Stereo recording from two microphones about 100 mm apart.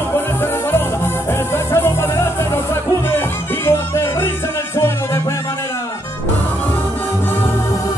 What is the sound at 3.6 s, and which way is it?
Music, 25° left (ahead or behind).